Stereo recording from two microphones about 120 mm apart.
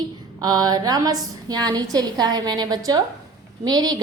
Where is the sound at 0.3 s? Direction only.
30° right (ahead or behind).